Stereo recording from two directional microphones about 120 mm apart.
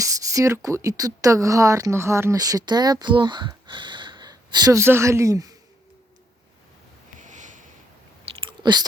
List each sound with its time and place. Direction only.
0.0 s speech: 25° right (ahead or behind)
4.8 s a man's voice: 20° right (ahead or behind)
7.2 s sniff: 90° right
8.2 s chewing: 45° right (ahead or behind)